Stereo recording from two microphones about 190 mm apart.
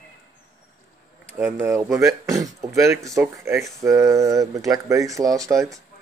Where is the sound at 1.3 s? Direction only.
10° right (ahead or behind).